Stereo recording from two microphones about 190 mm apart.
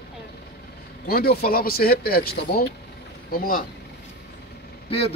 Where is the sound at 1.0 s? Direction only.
55° left (ahead or behind).